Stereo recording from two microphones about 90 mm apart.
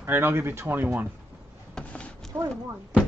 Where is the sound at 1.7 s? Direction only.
15° left (ahead or behind).